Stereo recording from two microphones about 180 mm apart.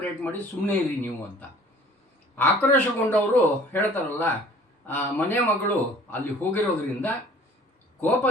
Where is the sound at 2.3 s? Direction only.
10° left (ahead or behind).